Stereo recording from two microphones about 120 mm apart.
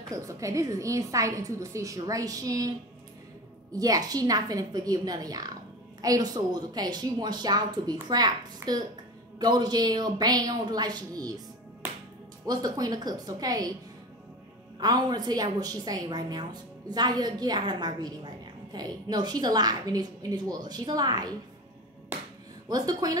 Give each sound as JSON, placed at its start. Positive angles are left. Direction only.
{"t": 0.1, "sound": "a woman's voice", "side_deg": -25}
{"t": 3.7, "sound": "a woman's voice", "side_deg": -30}
{"t": 12.4, "sound": "a woman's voice", "side_deg": -35}
{"t": 14.8, "sound": "a woman's voice", "side_deg": -35}
{"t": 22.7, "sound": "a woman's voice", "side_deg": -30}